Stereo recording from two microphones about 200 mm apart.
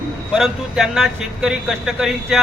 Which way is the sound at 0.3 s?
Centre (ahead or behind).